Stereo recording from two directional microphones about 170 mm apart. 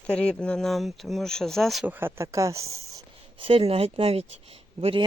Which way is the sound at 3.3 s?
30° right (ahead or behind).